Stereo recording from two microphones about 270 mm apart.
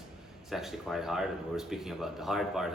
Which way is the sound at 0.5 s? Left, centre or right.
Centre.